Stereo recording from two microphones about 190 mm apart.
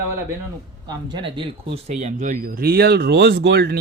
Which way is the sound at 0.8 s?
25° right (ahead or behind).